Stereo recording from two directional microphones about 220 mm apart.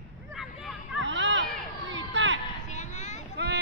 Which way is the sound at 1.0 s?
55° right (ahead or behind).